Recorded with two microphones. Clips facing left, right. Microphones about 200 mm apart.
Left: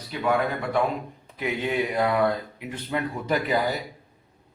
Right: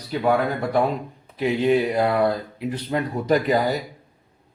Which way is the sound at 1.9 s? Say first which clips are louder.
Right 3 dB; 30° right (ahead or behind).